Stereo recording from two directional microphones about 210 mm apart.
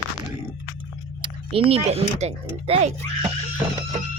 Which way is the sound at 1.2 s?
25° right (ahead or behind).